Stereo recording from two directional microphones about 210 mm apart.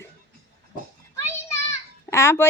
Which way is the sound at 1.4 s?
15° left (ahead or behind).